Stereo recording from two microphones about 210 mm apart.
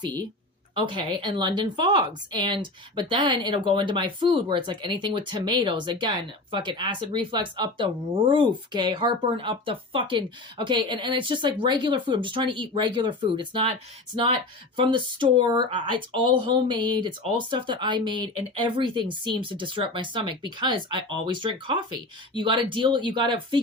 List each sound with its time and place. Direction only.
0.8 s speech: 20° right (ahead or behind)